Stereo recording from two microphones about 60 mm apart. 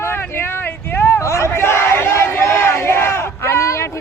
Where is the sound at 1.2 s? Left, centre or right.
Left.